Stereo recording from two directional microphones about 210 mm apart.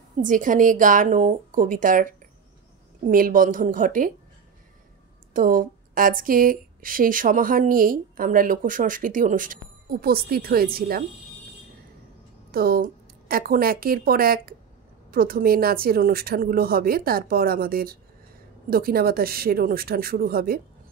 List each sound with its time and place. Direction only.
0.2 s speech: 40° right (ahead or behind)
3.1 s speech: 40° right (ahead or behind)
5.3 s speech: 40° right (ahead or behind)
12.4 s a woman's voice: 45° right (ahead or behind)